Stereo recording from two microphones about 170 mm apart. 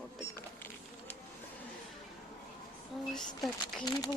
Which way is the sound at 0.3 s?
15° left (ahead or behind).